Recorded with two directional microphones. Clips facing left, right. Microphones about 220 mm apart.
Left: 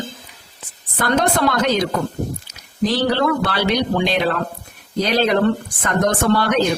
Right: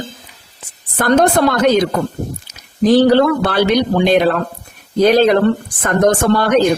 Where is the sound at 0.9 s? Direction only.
50° right (ahead or behind).